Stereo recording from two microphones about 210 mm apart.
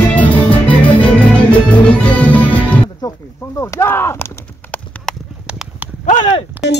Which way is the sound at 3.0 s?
20° left (ahead or behind).